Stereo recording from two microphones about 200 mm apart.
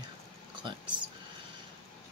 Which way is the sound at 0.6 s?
25° right (ahead or behind).